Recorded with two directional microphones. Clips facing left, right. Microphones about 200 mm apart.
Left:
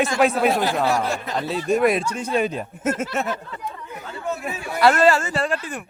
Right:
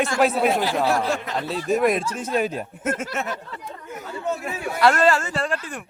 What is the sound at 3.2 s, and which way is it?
Speech, 35° left (ahead or behind).